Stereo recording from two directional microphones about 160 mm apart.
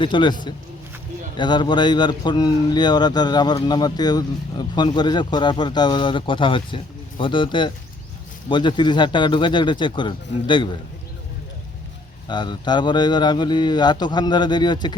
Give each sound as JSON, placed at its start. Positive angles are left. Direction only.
{"t": 0.0, "sound": "speech", "side_deg": 30}
{"t": 12.3, "sound": "speech", "side_deg": 30}